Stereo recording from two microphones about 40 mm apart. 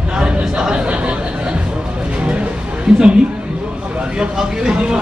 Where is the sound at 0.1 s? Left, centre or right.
Right.